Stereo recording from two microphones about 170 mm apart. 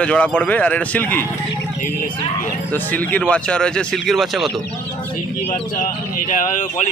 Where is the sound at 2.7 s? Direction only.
10° left (ahead or behind).